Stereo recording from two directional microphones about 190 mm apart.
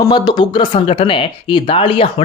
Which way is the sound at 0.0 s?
20° left (ahead or behind).